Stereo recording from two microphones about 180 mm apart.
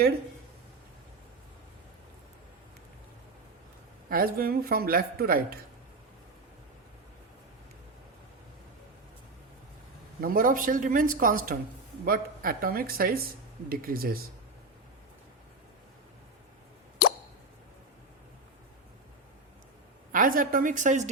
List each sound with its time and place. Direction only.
4.1 s a man's voice: 55° right (ahead or behind)
10.2 s a man's voice: 50° right (ahead or behind)
20.1 s speech: 50° right (ahead or behind)